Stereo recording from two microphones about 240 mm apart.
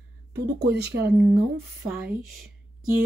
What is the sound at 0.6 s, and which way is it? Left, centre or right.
Speech, right.